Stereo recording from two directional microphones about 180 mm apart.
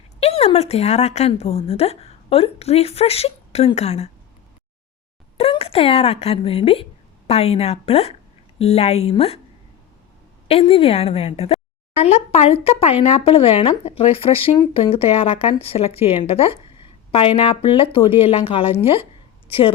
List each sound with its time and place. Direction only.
0.2 s a woman's voice: 35° left (ahead or behind)
5.4 s a woman's voice: 35° left (ahead or behind)
10.5 s a woman's voice: 30° left (ahead or behind)